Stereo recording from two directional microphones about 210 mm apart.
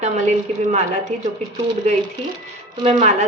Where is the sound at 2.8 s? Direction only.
30° right (ahead or behind).